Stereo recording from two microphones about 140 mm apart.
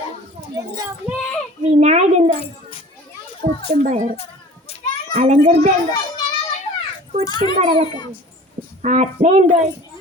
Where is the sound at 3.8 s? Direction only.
60° right (ahead or behind).